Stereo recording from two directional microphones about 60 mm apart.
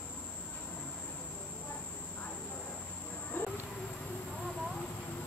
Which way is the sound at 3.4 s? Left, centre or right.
Left.